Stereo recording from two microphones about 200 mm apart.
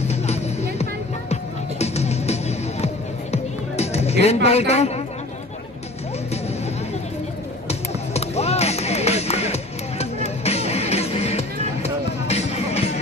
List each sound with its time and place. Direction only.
0.1 s music: 35° left (ahead or behind)
7.6 s music: 30° left (ahead or behind)